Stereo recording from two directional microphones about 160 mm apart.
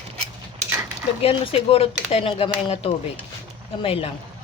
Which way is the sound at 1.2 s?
35° left (ahead or behind).